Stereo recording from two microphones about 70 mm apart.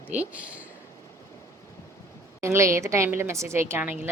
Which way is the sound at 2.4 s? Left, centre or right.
Right.